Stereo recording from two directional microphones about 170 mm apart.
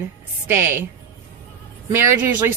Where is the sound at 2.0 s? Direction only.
15° right (ahead or behind).